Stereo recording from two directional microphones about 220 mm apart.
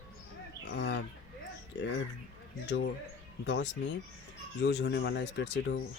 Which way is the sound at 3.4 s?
55° left (ahead or behind).